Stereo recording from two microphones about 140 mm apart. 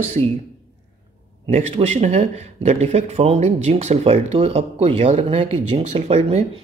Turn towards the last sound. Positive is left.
turn(degrees=-50)  # may be behind; listen again after turning